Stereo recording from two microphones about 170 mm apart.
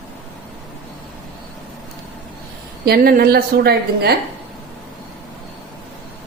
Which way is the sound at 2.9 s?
60° right (ahead or behind).